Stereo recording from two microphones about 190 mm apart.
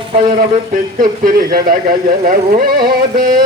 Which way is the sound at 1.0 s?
45° right (ahead or behind).